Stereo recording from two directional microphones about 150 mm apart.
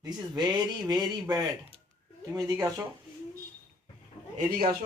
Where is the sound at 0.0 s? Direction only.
25° right (ahead or behind).